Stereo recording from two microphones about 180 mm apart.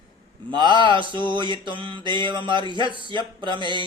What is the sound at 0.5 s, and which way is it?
Mantra, 25° right (ahead or behind).